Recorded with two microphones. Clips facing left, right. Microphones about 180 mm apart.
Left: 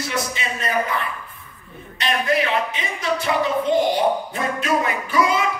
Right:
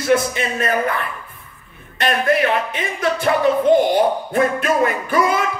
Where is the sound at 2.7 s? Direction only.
55° right (ahead or behind).